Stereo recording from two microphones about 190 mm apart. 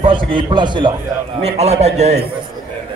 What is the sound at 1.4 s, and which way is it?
Speech, 35° right (ahead or behind).